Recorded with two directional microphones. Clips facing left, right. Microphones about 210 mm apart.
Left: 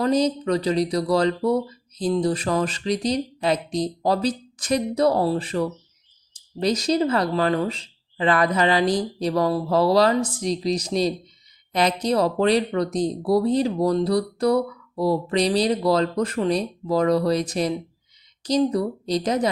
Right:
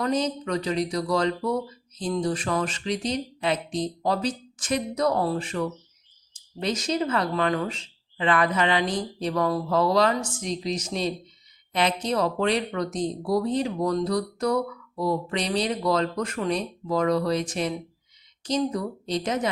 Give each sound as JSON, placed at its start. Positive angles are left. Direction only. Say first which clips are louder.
{"t": 0.0, "sound": "speech", "louder": "left 5 dB", "side_deg": 35}